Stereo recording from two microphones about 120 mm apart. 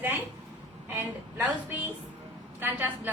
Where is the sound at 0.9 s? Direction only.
20° right (ahead or behind).